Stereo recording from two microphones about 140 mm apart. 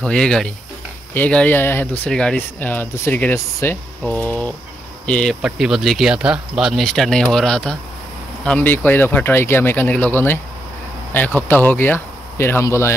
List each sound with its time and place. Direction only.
0.0 s speech: 5° left (ahead or behind)
4.3 s mechanisms: 10° left (ahead or behind)
5.0 s speech: 5° left (ahead or behind)